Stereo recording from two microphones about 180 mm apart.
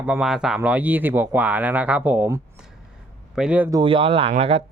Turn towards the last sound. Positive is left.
turn(degrees=-35)  # may be behind; listen again after turning